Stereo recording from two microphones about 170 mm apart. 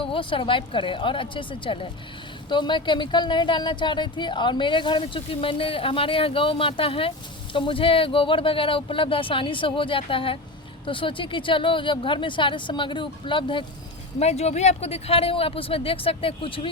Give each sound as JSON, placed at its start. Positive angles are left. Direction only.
{"t": 0.0, "sound": "speech", "side_deg": 30}
{"t": 14.2, "sound": "speech", "side_deg": 40}